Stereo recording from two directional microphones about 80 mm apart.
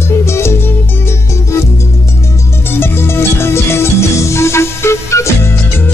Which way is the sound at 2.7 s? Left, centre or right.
Left.